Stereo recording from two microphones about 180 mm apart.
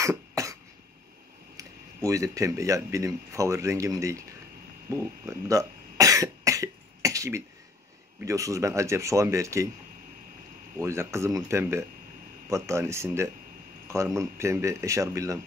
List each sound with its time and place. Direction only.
0.0 s cough: 15° right (ahead or behind)
1.6 s speech: 15° right (ahead or behind)
4.8 s cough: 15° right (ahead or behind)
8.2 s speech: 15° right (ahead or behind)
10.8 s speech: 15° right (ahead or behind)